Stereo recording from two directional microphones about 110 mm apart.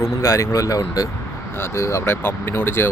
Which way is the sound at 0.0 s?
25° left (ahead or behind).